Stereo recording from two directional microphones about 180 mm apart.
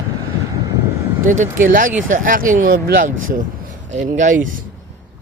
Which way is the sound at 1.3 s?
45° right (ahead or behind).